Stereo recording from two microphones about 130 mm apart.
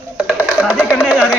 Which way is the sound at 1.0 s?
5° right (ahead or behind).